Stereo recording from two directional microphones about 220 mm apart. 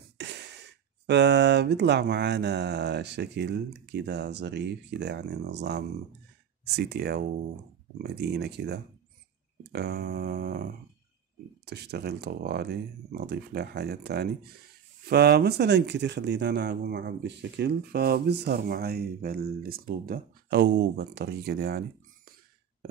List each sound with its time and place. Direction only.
0.2 s speech: 50° right (ahead or behind)